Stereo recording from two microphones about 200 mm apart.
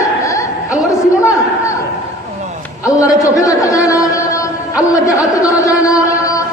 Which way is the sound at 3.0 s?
15° left (ahead or behind).